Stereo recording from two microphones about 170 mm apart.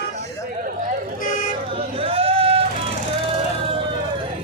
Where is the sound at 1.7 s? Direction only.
35° right (ahead or behind).